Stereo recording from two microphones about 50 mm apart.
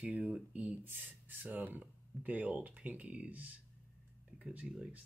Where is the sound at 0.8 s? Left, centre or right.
Right.